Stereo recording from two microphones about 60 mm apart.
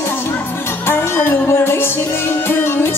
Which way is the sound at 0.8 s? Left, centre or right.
Left.